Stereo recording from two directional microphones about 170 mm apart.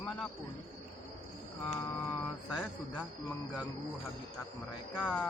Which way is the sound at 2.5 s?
5° left (ahead or behind).